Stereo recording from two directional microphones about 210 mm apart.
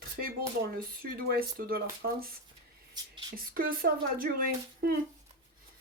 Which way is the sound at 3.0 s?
20° right (ahead or behind).